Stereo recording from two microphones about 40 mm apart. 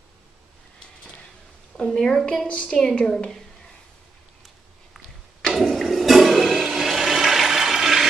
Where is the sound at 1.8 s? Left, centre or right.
Centre.